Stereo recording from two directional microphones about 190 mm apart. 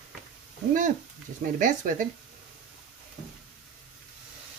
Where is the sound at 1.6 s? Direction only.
40° right (ahead or behind).